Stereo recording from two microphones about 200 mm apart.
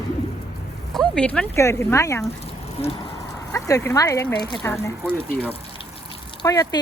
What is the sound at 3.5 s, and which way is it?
Speech, 15° left (ahead or behind).